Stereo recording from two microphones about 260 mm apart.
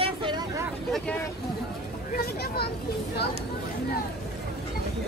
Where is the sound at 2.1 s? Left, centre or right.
Left.